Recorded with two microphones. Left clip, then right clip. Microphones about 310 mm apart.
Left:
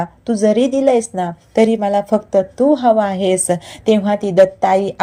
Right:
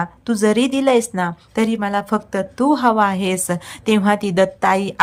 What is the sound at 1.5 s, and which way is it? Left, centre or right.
Speech, centre.